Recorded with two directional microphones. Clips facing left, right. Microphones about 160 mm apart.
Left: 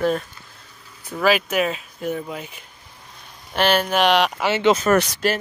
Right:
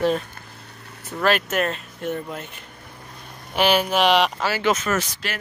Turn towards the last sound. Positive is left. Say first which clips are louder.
# left 7 dB
turn(degrees=70)  # may be behind; listen again after turning